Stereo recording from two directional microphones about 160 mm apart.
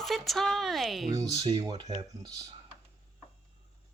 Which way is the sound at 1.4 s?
30° right (ahead or behind).